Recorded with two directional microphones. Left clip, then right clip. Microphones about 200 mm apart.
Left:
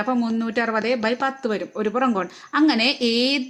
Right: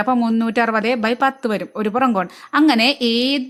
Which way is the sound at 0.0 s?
30° right (ahead or behind).